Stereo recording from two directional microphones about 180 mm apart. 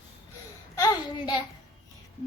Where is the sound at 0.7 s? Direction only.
20° left (ahead or behind).